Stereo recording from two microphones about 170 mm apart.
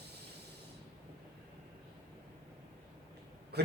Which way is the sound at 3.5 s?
70° right (ahead or behind).